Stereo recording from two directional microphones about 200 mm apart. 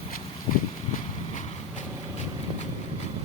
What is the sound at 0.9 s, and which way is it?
Vehicle, 35° left (ahead or behind).